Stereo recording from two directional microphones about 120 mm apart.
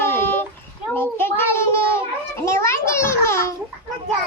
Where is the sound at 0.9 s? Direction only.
20° left (ahead or behind).